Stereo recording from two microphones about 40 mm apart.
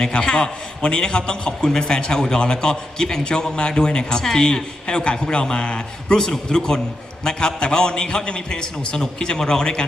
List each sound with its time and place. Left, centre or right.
0.1 s a man's voice: left
6.1 s a man's voice: centre